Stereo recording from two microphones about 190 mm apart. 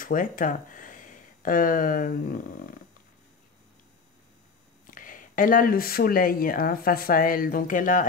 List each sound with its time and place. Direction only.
0.0 s speech: 45° left (ahead or behind)
4.9 s speech: 45° left (ahead or behind)